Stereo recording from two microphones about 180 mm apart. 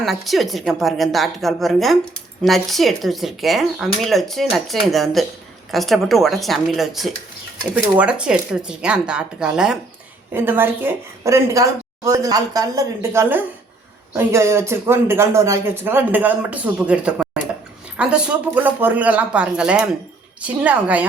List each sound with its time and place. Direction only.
0.0 s speech: centre (ahead or behind)